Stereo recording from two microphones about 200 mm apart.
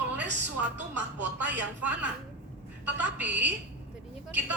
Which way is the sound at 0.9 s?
10° right (ahead or behind).